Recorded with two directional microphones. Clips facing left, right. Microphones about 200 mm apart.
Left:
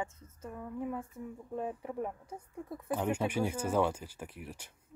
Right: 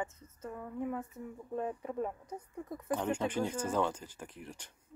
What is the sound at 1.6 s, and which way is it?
Speech, 15° left (ahead or behind).